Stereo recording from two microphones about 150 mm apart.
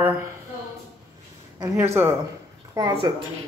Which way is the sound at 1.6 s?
15° right (ahead or behind).